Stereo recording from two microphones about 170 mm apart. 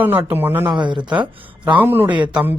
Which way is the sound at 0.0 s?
10° right (ahead or behind).